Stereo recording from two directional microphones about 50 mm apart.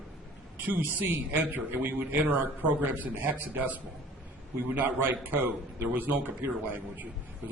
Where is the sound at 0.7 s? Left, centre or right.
Right.